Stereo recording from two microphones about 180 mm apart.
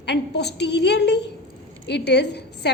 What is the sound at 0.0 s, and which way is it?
A woman's voice, 70° left (ahead or behind).